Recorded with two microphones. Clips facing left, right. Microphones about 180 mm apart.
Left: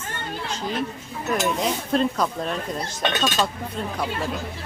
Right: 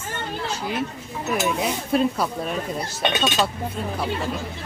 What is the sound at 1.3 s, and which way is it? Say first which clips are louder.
Speech: even; 5° right (ahead or behind).